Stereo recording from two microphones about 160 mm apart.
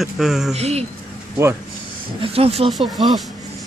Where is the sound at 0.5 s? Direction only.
40° right (ahead or behind).